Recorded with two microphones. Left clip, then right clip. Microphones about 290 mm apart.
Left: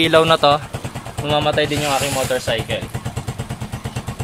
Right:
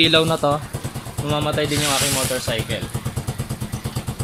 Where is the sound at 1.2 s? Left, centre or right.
Left.